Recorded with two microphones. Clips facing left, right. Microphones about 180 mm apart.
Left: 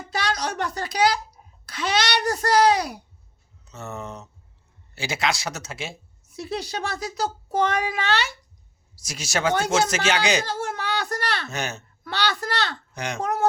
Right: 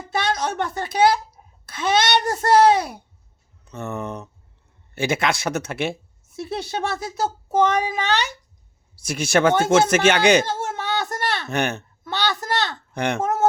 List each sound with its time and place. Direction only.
0.2 s a sound: 25° right (ahead or behind)
0.6 s a child's voice: 25° right (ahead or behind)
3.6 s speech: 55° right (ahead or behind)
6.4 s a child's voice: 25° right (ahead or behind)
9.0 s speech: 55° right (ahead or behind)
10.4 s baby cry: 20° right (ahead or behind)
11.4 s speech: 60° right (ahead or behind)
12.0 s a woman's voice: 20° right (ahead or behind)
12.9 s speech: 60° right (ahead or behind)
13.2 s speech: 25° right (ahead or behind)